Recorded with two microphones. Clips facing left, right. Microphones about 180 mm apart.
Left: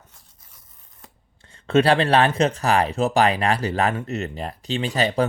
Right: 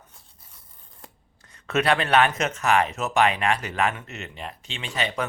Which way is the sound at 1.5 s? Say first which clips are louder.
Left 5 dB; 30° left (ahead or behind).